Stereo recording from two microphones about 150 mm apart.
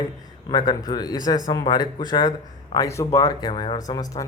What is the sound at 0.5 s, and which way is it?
A man's voice, 30° left (ahead or behind).